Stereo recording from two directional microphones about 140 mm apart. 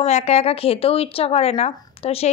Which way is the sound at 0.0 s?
50° left (ahead or behind).